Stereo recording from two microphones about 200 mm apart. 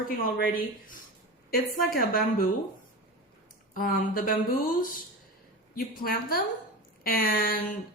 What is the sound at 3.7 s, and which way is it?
Speech, 45° left (ahead or behind).